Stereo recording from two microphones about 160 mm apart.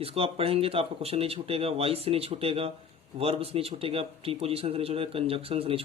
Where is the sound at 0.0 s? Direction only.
35° right (ahead or behind).